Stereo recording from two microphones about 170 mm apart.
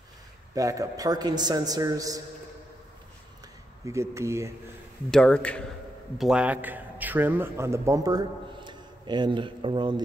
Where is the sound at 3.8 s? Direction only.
15° right (ahead or behind).